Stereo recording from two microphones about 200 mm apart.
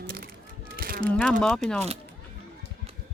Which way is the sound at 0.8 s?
50° right (ahead or behind).